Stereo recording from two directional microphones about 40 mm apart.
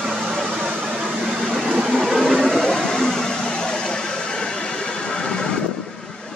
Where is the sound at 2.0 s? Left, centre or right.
Centre.